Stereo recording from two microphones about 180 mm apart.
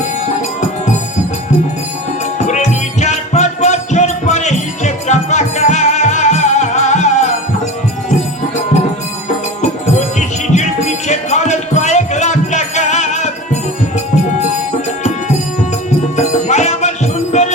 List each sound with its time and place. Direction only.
2.5 s music: 40° left (ahead or behind)
9.6 s music: 40° left (ahead or behind)
16.1 s music: 40° left (ahead or behind)